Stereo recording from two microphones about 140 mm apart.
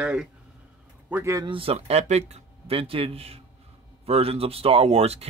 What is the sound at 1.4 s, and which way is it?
Speech, 40° right (ahead or behind).